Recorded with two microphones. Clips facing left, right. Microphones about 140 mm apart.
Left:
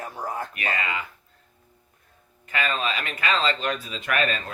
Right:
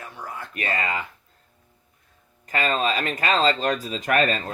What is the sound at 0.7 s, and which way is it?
Speech, 40° right (ahead or behind).